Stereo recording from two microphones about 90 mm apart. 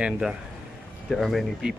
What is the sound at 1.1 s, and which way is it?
Speech, 5° left (ahead or behind).